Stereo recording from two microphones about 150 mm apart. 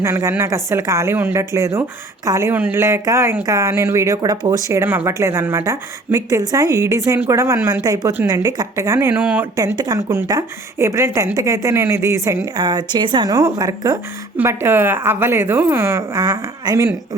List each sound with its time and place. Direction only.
0.0 s a woman's voice: 20° right (ahead or behind)
9.6 s a woman's voice: 25° right (ahead or behind)